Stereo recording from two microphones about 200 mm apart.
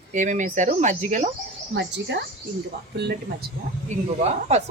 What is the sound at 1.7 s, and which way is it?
A woman's voice, 60° right (ahead or behind).